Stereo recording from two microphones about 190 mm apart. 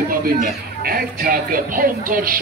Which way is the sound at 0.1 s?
50° right (ahead or behind).